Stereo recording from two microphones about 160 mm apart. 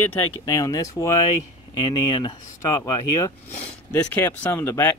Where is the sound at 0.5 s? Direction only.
20° left (ahead or behind).